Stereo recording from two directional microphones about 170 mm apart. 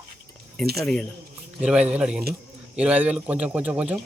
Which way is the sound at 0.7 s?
5° left (ahead or behind).